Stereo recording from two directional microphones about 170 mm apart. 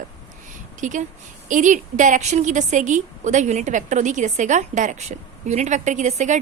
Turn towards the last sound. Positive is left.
turn(degrees=-45)  # may be behind; listen again after turning